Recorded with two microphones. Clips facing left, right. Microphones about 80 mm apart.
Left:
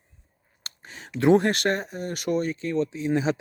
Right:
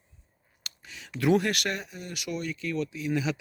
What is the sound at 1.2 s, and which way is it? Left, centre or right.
Speech, left.